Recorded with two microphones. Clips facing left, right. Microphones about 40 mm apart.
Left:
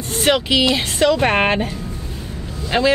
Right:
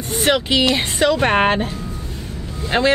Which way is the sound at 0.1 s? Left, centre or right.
Centre.